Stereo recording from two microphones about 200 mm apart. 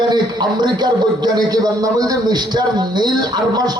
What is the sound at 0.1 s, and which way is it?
A man's voice, 20° right (ahead or behind).